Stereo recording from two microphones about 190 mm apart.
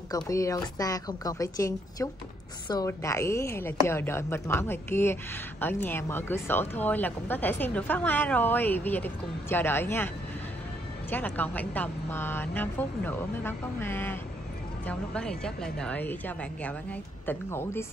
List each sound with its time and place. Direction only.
0.1 s a woman's voice: 15° left (ahead or behind)